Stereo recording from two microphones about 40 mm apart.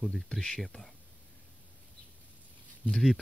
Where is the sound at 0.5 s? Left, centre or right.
Centre.